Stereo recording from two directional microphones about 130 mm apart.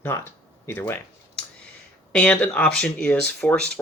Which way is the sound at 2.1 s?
10° left (ahead or behind).